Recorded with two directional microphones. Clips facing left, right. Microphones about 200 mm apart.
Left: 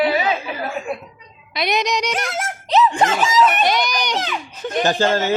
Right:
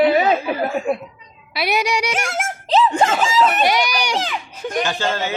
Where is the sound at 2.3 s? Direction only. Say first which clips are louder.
Even; 30° right (ahead or behind).